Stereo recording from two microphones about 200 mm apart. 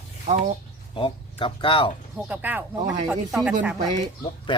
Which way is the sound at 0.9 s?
25° left (ahead or behind).